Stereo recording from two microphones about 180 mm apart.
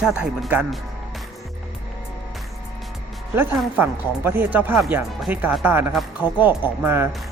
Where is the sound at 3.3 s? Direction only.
10° right (ahead or behind).